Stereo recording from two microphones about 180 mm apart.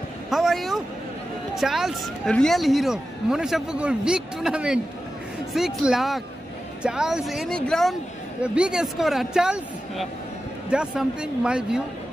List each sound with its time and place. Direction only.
0.3 s a woman's voice: centre (ahead or behind)